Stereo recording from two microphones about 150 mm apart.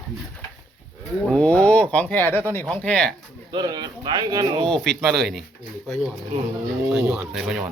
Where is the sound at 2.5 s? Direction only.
15° left (ahead or behind).